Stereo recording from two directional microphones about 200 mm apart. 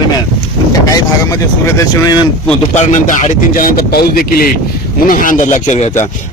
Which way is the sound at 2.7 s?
35° left (ahead or behind).